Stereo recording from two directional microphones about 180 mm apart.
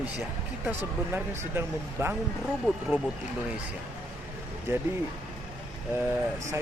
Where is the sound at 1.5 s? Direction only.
15° right (ahead or behind).